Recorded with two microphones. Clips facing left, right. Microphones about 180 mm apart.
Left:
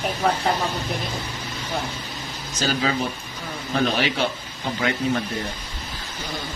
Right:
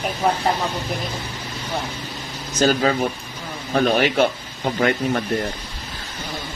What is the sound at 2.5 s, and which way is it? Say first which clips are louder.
A man's voice: right 6 dB; 50° right (ahead or behind).